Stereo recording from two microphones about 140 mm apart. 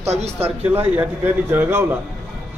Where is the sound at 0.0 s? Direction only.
50° right (ahead or behind).